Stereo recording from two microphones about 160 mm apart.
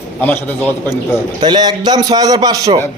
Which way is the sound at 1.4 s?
25° right (ahead or behind).